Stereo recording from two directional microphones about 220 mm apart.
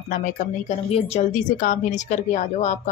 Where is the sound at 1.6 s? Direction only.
35° left (ahead or behind).